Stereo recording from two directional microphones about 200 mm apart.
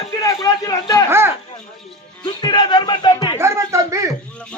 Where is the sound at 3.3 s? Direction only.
15° right (ahead or behind).